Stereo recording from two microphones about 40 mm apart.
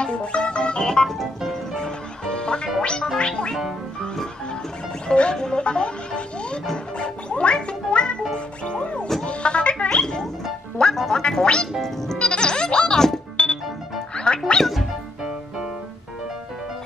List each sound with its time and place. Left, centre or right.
0.0 s music: left
1.0 s music: centre
1.8 s music: left
5.0 s music: left
14.6 s music: centre